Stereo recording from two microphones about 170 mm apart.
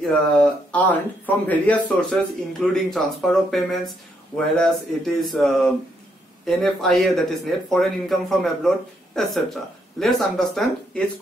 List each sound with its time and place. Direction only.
0.0 s speech: 5° left (ahead or behind)